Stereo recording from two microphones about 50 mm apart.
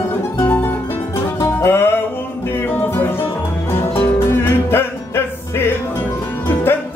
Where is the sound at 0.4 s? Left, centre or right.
Left.